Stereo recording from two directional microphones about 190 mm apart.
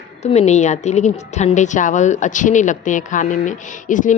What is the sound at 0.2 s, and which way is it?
A woman's voice, 35° left (ahead or behind).